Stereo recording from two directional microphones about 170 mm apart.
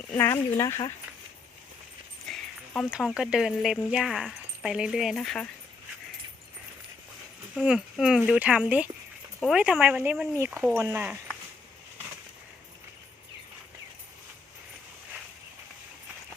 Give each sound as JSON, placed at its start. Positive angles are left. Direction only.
{"t": 0.1, "sound": "speech", "side_deg": 10}
{"t": 0.5, "sound": "speech", "side_deg": 20}
{"t": 2.2, "sound": "speech", "side_deg": 0}
{"t": 7.5, "sound": "speech", "side_deg": -5}